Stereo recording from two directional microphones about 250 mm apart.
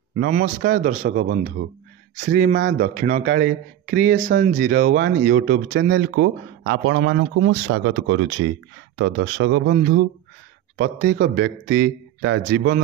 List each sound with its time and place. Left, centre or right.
0.2 s speech: right
5.8 s speech: right
9.8 s speech: right